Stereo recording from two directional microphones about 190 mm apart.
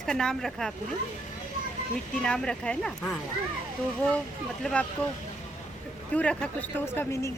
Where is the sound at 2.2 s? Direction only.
5° left (ahead or behind).